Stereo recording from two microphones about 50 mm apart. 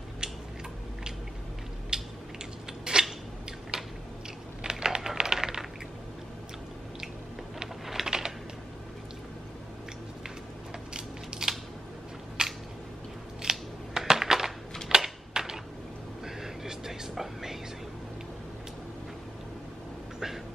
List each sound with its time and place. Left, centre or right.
1.9 s mechanisms: centre
2.8 s a sound: centre
4.6 s typing: centre
7.8 s typing: centre
10.9 s crushing: centre
12.4 s a sound: centre
13.4 s scissors: centre
14.9 s typewriter: centre
16.3 s whispering: centre